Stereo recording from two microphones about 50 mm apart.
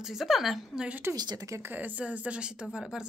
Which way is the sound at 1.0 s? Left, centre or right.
Right.